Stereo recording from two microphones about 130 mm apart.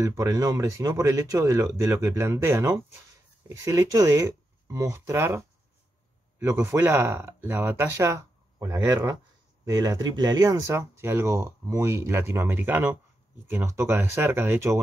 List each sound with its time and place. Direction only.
0.0 s speech: 25° right (ahead or behind)
6.4 s speech: 20° right (ahead or behind)